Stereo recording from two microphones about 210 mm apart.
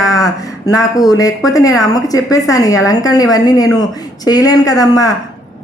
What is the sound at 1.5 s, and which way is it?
A woman's voice, 15° left (ahead or behind).